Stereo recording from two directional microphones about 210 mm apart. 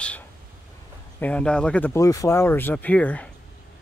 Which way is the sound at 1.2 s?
5° left (ahead or behind).